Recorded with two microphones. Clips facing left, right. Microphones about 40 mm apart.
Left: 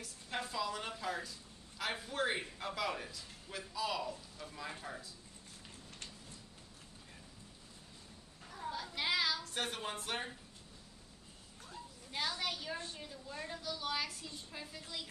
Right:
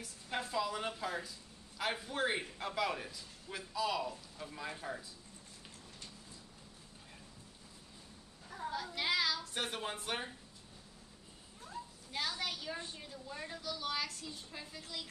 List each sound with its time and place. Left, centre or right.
0.0 s a woman's voice: centre
8.5 s a sound: centre
8.7 s a man's voice: centre
12.1 s a man's voice: centre